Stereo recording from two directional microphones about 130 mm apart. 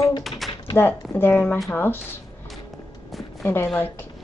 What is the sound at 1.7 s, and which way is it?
Speech, 15° left (ahead or behind).